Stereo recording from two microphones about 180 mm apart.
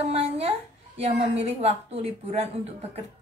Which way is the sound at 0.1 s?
35° right (ahead or behind).